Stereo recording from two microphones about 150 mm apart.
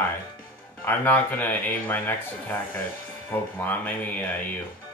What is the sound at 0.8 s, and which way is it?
Speech, 10° left (ahead or behind).